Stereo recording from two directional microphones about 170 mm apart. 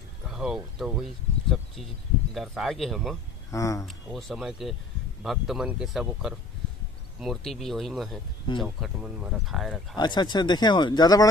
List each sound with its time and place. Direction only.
0.3 s speech: centre (ahead or behind)
3.5 s speech: 20° left (ahead or behind)
3.8 s speech: centre (ahead or behind)
9.9 s speech: 25° left (ahead or behind)